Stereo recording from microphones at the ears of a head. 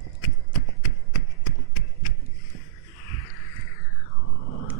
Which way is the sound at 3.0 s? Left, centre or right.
Left.